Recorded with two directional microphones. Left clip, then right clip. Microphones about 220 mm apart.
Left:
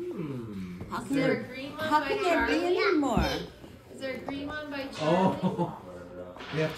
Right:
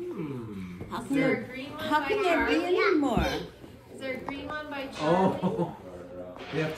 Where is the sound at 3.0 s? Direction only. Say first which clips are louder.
Even; 40° left (ahead or behind).